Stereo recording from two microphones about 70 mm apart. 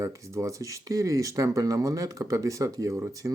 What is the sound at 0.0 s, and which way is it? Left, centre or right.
Speech, right.